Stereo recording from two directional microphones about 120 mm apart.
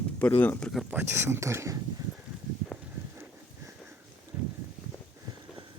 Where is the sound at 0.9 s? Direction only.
20° right (ahead or behind).